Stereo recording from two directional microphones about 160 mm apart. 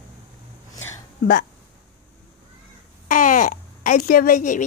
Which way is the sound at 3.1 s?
55° left (ahead or behind).